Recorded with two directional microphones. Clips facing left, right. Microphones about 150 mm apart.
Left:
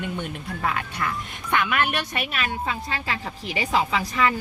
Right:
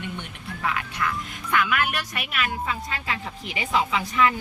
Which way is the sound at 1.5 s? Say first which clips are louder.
Left 1 dB; 25° left (ahead or behind).